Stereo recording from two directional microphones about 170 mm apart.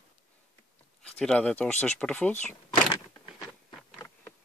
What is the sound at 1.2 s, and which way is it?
Speech, 5° left (ahead or behind).